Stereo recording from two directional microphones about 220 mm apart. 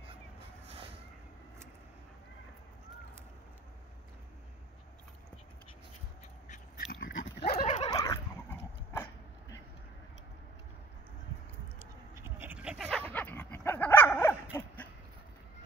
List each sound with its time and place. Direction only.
6.5 s dog: 40° left (ahead or behind)
7.9 s dog: 15° left (ahead or behind)
11.8 s dog: 10° right (ahead or behind)
13.1 s dog: 10° left (ahead or behind)